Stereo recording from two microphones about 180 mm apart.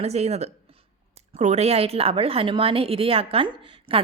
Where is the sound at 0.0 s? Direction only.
35° right (ahead or behind).